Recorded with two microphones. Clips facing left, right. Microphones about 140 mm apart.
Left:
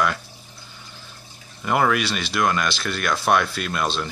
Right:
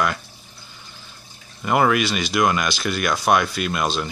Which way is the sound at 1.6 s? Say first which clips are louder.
Right 2 dB; 5° right (ahead or behind).